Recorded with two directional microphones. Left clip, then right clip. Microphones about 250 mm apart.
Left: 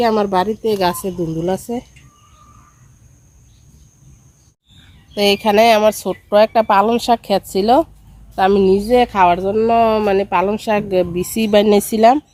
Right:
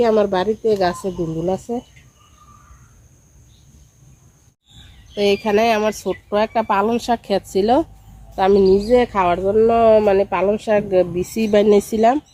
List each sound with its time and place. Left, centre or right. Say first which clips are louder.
0.0 s speech: left 1 dB; left
5.1 s speech: left 4 dB; left